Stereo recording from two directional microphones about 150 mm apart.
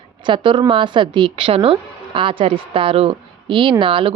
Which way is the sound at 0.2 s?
35° right (ahead or behind).